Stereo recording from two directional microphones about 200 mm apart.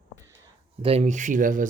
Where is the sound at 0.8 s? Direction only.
35° right (ahead or behind).